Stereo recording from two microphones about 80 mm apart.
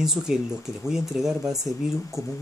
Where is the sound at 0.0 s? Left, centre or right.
Centre.